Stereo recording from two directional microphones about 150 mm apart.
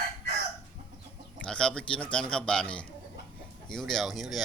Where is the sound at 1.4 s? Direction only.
5° left (ahead or behind).